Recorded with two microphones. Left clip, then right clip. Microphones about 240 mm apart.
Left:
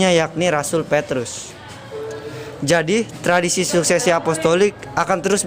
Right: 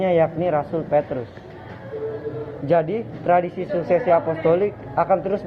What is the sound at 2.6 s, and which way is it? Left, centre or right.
Speech, left.